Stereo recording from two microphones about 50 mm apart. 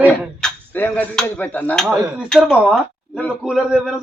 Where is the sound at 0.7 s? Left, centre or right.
Left.